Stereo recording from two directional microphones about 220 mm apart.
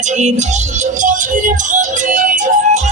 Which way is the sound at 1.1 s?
35° right (ahead or behind).